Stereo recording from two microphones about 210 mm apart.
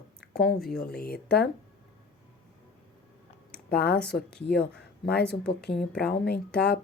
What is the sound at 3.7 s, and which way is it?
Mantra, 50° left (ahead or behind).